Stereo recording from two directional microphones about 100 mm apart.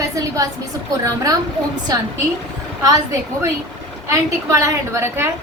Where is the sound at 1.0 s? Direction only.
35° right (ahead or behind).